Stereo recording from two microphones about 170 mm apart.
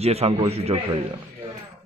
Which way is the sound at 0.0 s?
35° right (ahead or behind).